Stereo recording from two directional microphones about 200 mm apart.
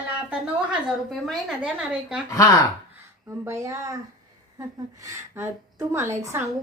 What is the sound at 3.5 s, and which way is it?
A woman's voice, 15° right (ahead or behind).